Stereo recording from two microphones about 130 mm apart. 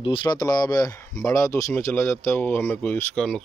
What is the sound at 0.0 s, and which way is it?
Speech, 40° left (ahead or behind).